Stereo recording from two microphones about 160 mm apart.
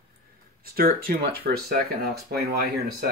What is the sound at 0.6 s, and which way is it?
Speech, 65° right (ahead or behind).